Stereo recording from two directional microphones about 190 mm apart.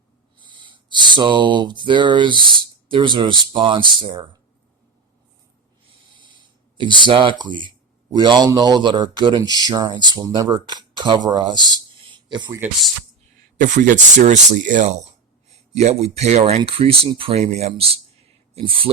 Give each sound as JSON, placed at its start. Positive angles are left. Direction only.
{"t": 0.3, "sound": "speech", "side_deg": -25}
{"t": 6.7, "sound": "speech", "side_deg": -25}
{"t": 12.1, "sound": "a sound", "side_deg": -25}
{"t": 13.6, "sound": "speech", "side_deg": -40}